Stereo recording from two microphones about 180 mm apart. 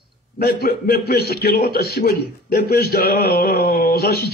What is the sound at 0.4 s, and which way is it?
A man's voice, 60° left (ahead or behind).